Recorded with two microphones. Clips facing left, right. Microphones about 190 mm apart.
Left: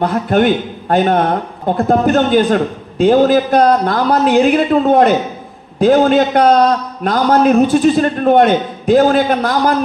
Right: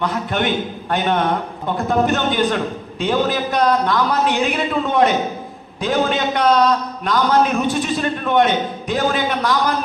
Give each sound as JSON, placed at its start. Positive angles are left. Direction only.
{"t": 0.0, "sound": "a man's voice", "side_deg": 50}